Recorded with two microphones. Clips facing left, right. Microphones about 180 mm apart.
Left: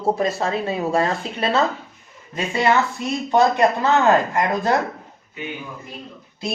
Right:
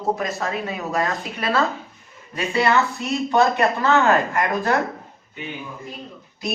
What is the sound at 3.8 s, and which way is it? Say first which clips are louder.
Speech: left 1 dB; 25° left (ahead or behind).